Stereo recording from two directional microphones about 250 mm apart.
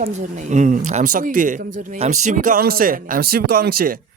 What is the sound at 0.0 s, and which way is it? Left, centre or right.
A man's voice, right.